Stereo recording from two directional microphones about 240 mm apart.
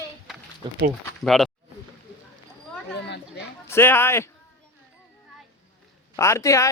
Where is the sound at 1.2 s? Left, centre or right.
Centre.